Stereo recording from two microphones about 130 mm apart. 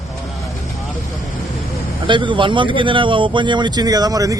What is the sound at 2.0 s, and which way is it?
Speech, 40° right (ahead or behind).